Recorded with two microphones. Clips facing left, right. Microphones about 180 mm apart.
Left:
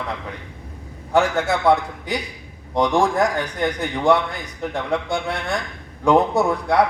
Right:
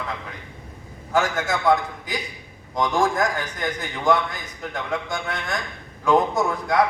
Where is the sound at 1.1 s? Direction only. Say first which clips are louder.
Left 4 dB; 30° left (ahead or behind).